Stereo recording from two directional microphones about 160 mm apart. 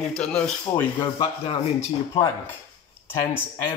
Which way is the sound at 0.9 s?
35° left (ahead or behind).